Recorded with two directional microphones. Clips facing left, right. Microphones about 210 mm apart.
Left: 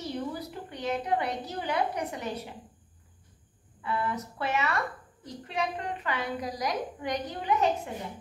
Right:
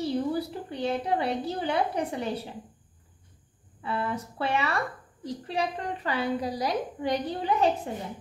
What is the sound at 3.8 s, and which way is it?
A woman's voice, 30° right (ahead or behind).